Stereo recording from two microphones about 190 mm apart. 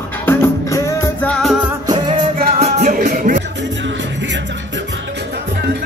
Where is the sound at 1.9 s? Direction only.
30° right (ahead or behind); by 3.4 s 45° right (ahead or behind).